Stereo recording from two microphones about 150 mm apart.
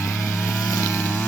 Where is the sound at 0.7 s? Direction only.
15° left (ahead or behind).